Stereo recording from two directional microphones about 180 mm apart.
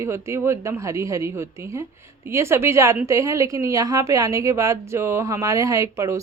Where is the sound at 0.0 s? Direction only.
15° right (ahead or behind).